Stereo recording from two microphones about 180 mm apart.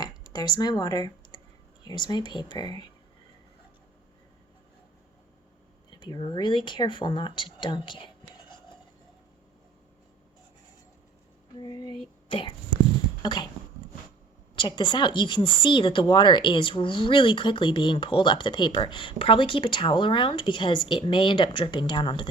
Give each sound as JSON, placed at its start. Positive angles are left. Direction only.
{"t": 0.0, "sound": "speech", "side_deg": 20}
{"t": 5.9, "sound": "speech", "side_deg": 25}
{"t": 11.5, "sound": "a sound", "side_deg": 25}
{"t": 12.3, "sound": "speech", "side_deg": 30}
{"t": 14.5, "sound": "speech", "side_deg": 25}